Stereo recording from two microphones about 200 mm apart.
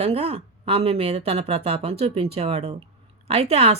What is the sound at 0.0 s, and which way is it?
A woman's voice, 30° right (ahead or behind).